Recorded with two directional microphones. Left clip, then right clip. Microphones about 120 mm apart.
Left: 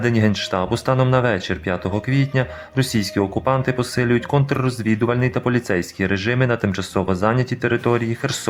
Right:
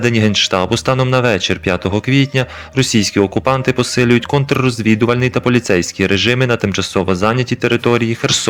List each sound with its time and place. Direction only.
0.0 s speech: 25° right (ahead or behind)